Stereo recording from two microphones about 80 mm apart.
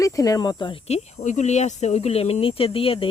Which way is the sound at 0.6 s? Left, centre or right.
Left.